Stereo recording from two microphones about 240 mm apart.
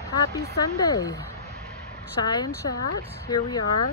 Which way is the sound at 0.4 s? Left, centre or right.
Centre.